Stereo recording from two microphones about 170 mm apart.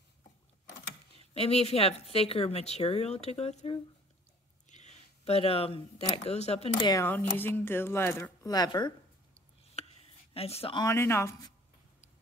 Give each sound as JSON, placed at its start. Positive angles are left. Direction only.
{"t": 1.3, "sound": "a woman's voice", "side_deg": 35}
{"t": 6.8, "sound": "speech", "side_deg": 25}
{"t": 7.1, "sound": "speech", "side_deg": 10}
{"t": 9.8, "sound": "a sound", "side_deg": 40}
{"t": 10.3, "sound": "a woman's voice", "side_deg": 35}
{"t": 10.8, "sound": "speech", "side_deg": 15}